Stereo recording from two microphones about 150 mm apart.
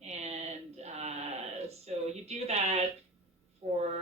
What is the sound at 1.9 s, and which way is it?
Speech, 45° right (ahead or behind).